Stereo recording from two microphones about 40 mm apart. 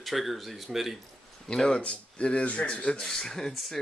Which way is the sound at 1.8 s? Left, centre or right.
Left.